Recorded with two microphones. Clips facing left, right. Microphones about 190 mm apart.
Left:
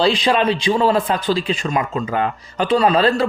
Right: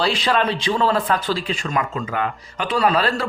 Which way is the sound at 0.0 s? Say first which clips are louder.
Left 4 dB; 15° left (ahead or behind).